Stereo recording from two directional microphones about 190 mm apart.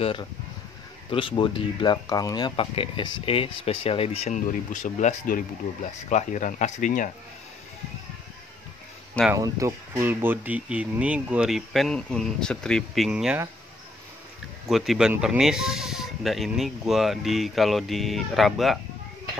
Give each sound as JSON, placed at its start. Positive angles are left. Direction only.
{"t": 0.0, "sound": "speech", "side_deg": 25}
{"t": 9.3, "sound": "speech", "side_deg": -15}
{"t": 14.7, "sound": "speech", "side_deg": 0}